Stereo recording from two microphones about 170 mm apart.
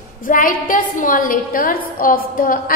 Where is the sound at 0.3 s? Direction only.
55° left (ahead or behind).